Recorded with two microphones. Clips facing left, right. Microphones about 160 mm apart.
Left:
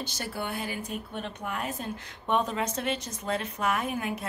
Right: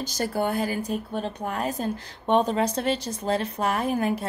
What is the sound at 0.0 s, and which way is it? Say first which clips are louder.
Speech: right 8 dB; 40° right (ahead or behind).